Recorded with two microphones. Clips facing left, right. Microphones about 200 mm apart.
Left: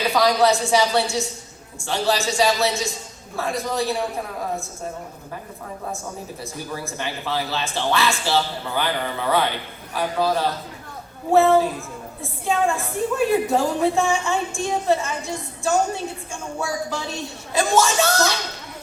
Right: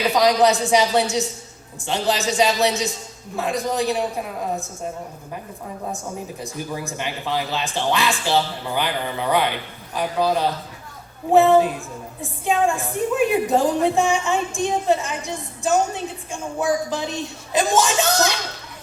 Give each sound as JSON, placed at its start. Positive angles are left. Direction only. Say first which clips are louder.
{"t": 0.1, "sound": "a man's voice", "louder": "right 1 dB", "side_deg": -20}
{"t": 6.4, "sound": "a woman's voice", "louder": "right 1 dB", "side_deg": -15}